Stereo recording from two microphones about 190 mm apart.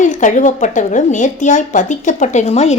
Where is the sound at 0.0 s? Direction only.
40° left (ahead or behind).